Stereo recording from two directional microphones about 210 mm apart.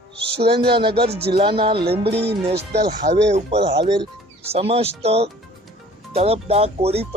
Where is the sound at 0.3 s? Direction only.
25° right (ahead or behind).